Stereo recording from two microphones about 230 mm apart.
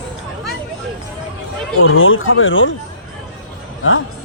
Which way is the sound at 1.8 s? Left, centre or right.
Left.